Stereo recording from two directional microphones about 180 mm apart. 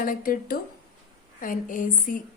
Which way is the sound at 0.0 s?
50° left (ahead or behind).